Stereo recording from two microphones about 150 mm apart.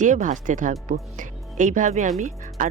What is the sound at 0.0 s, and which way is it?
Speech, 60° right (ahead or behind).